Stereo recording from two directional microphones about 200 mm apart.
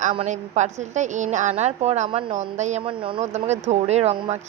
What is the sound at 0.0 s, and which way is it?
A woman's voice, 40° right (ahead or behind).